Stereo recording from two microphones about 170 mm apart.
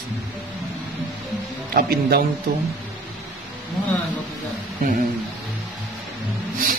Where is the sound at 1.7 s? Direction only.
60° right (ahead or behind).